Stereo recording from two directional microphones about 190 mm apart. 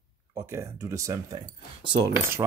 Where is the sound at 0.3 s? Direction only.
15° right (ahead or behind).